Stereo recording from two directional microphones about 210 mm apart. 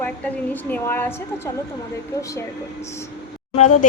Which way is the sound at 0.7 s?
10° left (ahead or behind).